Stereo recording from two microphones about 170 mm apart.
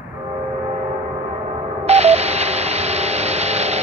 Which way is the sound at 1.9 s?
40° right (ahead or behind).